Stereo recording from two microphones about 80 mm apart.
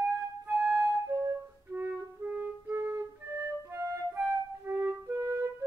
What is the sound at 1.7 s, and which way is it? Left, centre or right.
Music, right.